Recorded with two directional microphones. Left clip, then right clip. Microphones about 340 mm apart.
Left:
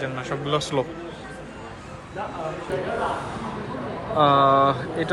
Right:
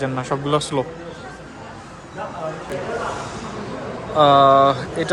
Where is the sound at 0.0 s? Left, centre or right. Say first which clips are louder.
Right 5 dB; centre.